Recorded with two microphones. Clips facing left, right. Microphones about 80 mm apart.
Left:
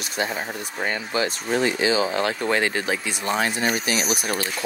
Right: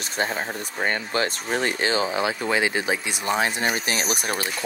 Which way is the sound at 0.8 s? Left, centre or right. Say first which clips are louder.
Even; right.